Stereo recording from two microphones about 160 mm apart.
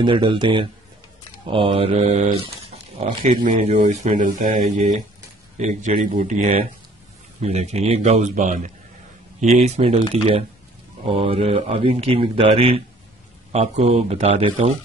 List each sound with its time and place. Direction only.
0.0 s speech: 30° right (ahead or behind)
2.4 s a sound: 40° right (ahead or behind)
3.4 s speech: 45° right (ahead or behind)